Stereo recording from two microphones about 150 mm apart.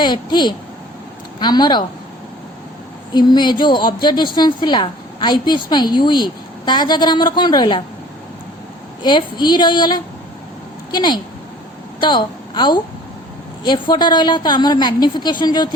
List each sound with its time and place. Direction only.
0.0 s a woman's voice: 30° left (ahead or behind)
3.1 s a woman's voice: 30° left (ahead or behind)
9.0 s a woman's voice: 30° left (ahead or behind)